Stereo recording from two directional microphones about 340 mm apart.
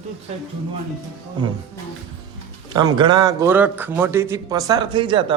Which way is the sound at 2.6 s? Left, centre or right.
Centre.